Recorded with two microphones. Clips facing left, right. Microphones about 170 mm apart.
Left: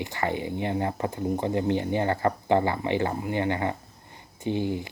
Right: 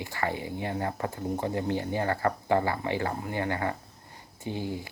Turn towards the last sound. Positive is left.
turn(degrees=20)  # may be behind; listen again after turning